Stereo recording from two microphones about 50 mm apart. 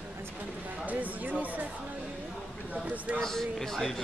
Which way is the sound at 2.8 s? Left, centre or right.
Right.